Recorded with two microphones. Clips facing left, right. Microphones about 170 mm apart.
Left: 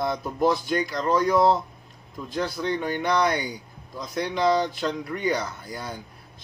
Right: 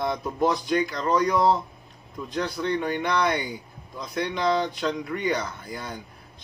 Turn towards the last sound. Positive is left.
turn(degrees=0)  # may be behind; listen again after turning